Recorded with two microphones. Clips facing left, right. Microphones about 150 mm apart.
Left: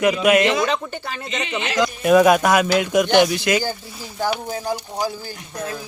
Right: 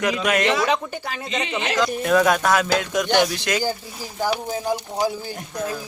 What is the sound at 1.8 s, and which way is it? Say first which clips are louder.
Speech: left 5 dB; 10° left (ahead or behind).